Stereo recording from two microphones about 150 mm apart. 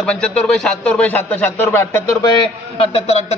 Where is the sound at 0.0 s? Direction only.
5° left (ahead or behind).